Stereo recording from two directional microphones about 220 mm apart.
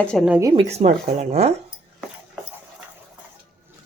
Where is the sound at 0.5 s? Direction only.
30° right (ahead or behind).